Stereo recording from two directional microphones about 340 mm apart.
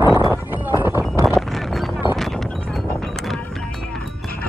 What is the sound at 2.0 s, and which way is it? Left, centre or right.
Clip-clop, centre.